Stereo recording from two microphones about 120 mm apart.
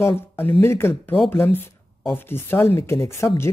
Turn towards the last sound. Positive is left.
turn(degrees=20)  # may be behind; listen again after turning